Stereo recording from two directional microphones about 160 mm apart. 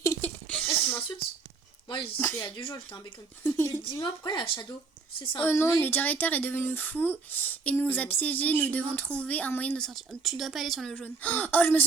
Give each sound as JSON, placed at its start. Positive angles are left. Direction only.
{"t": 0.0, "sound": "a sound", "side_deg": 20}
{"t": 0.4, "sound": "a sound", "side_deg": 5}
{"t": 0.7, "sound": "sneeze", "side_deg": 10}
{"t": 2.1, "sound": "speech", "side_deg": 15}
{"t": 2.4, "sound": "speech", "side_deg": 30}
{"t": 3.4, "sound": "speech", "side_deg": 15}
{"t": 3.9, "sound": "speech", "side_deg": 30}
{"t": 5.4, "sound": "speech", "side_deg": 15}